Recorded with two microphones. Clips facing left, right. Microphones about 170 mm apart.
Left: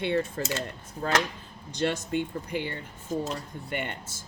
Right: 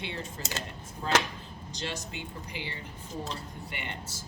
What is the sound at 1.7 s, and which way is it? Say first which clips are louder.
A woman's voice: left 11 dB; 55° left (ahead or behind).